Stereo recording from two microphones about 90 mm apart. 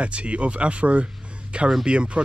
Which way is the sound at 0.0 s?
15° right (ahead or behind).